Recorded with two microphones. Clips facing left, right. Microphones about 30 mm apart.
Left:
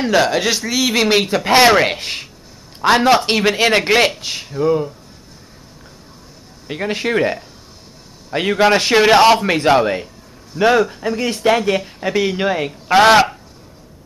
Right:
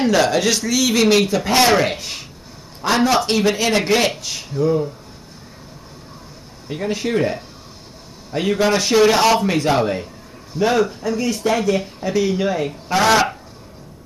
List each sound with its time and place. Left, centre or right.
0.0 s a man's voice: centre
6.7 s a man's voice: left